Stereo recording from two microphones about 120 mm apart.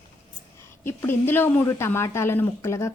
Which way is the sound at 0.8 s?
20° left (ahead or behind).